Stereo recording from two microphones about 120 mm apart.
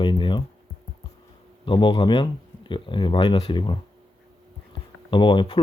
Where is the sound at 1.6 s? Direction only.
40° left (ahead or behind).